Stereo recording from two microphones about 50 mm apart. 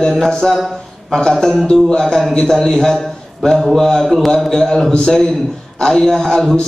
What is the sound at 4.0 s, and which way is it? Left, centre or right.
Speech, centre.